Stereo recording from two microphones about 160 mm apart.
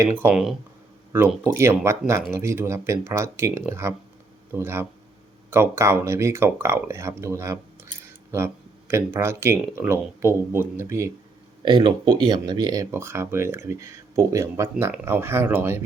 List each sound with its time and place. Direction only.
0.0 s speech: 15° right (ahead or behind)
1.5 s speech: 15° right (ahead or behind)
11.6 s speech: 30° right (ahead or behind)